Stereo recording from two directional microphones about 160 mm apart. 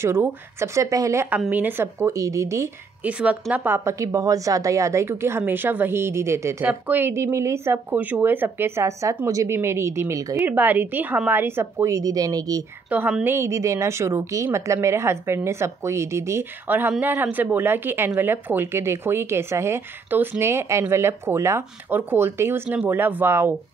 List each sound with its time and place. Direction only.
0.0 s speech: 15° right (ahead or behind)
12.9 s speech: 10° right (ahead or behind)